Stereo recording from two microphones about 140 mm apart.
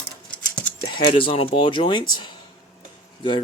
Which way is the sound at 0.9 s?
35° left (ahead or behind).